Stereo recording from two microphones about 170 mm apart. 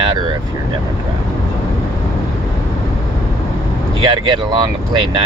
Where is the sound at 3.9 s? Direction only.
25° right (ahead or behind).